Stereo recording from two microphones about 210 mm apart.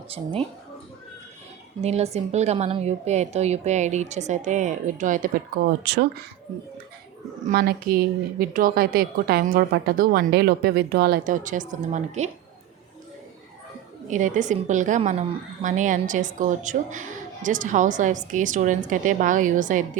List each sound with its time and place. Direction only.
0.1 s speech: 30° right (ahead or behind)
1.8 s a woman's voice: 30° right (ahead or behind)
5.8 s speech: 55° right (ahead or behind)
7.4 s speech: 45° right (ahead or behind)
14.1 s a woman's voice: 35° right (ahead or behind)